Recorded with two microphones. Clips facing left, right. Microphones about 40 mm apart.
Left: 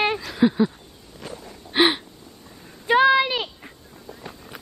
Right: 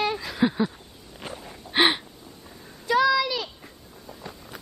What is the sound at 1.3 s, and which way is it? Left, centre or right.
Gasp, centre.